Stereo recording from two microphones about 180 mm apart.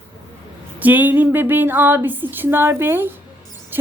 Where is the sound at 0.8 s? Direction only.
10° right (ahead or behind).